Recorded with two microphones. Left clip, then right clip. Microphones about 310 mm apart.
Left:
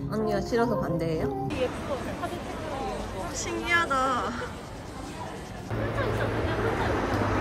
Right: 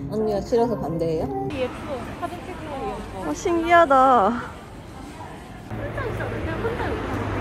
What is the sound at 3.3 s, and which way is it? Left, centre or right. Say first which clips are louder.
A woman's voice: right 9 dB; centre.